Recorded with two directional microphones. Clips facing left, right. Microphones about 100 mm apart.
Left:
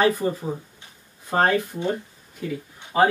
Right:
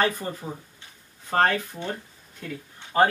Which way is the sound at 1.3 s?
20° left (ahead or behind).